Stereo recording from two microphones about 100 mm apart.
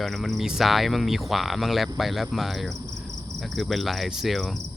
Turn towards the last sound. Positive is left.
turn(degrees=0)  # may be behind; listen again after turning